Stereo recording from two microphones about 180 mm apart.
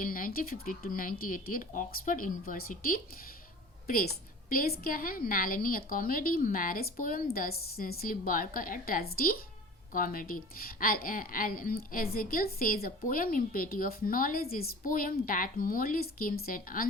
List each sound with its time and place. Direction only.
0.0 s a woman's voice: 50° left (ahead or behind)